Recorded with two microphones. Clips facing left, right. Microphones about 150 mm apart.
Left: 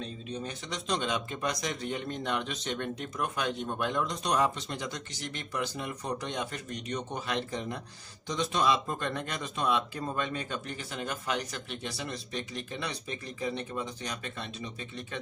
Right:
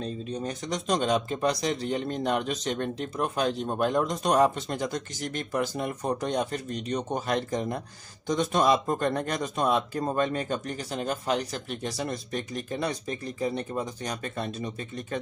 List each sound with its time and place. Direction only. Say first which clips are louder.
0.0 s speech: right 5 dB; 40° right (ahead or behind)